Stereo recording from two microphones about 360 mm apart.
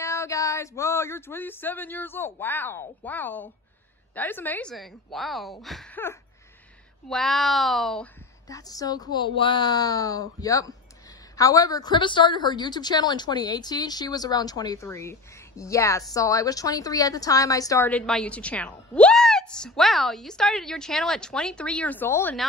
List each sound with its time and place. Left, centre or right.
0.0 s a woman's voice: centre